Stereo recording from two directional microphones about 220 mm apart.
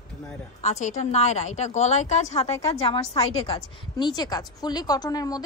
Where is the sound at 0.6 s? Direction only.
30° left (ahead or behind).